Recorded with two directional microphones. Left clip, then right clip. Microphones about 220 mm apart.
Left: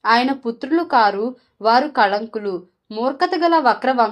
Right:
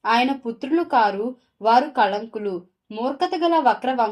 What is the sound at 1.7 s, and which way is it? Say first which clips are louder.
A woman's voice: left 2 dB; 20° left (ahead or behind).